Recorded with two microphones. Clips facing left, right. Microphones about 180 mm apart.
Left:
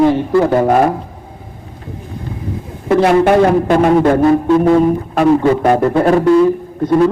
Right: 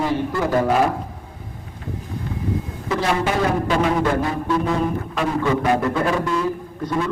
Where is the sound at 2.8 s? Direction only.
55° left (ahead or behind).